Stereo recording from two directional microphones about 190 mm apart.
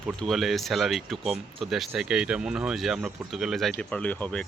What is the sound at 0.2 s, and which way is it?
Speech, centre (ahead or behind).